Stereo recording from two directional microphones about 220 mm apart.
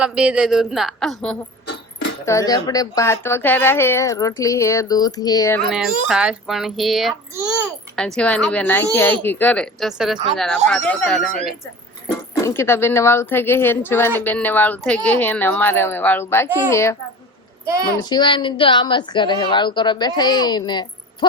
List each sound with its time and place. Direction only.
0.0 s speech: 5° right (ahead or behind)
1.6 s dog: 55° left (ahead or behind)
2.2 s a woman's voice: 15° left (ahead or behind)
5.7 s a woman's voice: centre (ahead or behind)
12.4 s a woman's voice: 10° left (ahead or behind)
18.0 s a woman's voice: 20° left (ahead or behind)